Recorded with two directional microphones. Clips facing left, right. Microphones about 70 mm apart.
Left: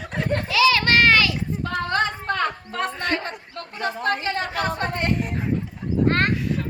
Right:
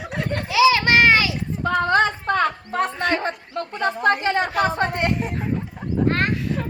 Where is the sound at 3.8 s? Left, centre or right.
Centre.